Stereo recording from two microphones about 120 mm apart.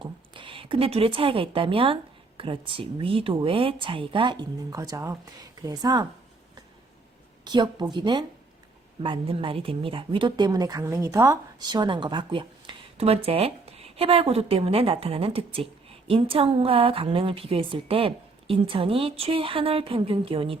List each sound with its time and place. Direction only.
0.0 s a woman's voice: 45° right (ahead or behind)
7.4 s a woman's voice: 40° right (ahead or behind)
11.7 s speech: 40° right (ahead or behind)